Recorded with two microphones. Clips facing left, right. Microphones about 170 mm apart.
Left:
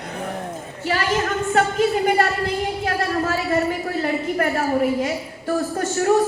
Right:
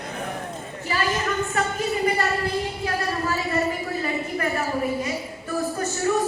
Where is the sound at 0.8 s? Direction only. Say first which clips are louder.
Left 4 dB; 75° left (ahead or behind).